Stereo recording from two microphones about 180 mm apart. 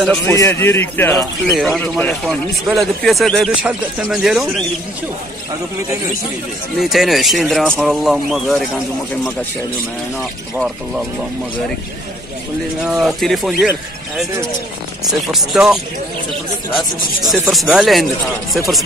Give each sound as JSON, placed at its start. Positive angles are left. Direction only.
{"t": 0.0, "sound": "a man's voice", "side_deg": 5}
{"t": 1.5, "sound": "speech", "side_deg": 0}
{"t": 6.8, "sound": "speech", "side_deg": 0}
{"t": 12.8, "sound": "speech", "side_deg": 0}
{"t": 17.2, "sound": "speech", "side_deg": 0}